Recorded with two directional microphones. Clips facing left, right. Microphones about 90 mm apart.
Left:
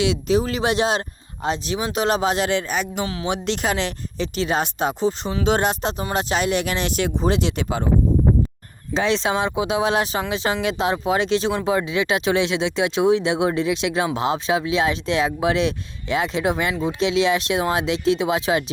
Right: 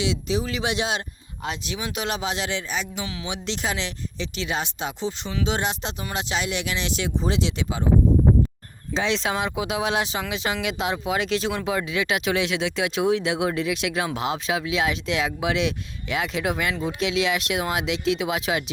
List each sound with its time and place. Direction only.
0.0 s speech: 55° left (ahead or behind)
8.9 s speech: 50° left (ahead or behind)
9.1 s speech: 30° left (ahead or behind)
9.9 s speech: 45° left (ahead or behind)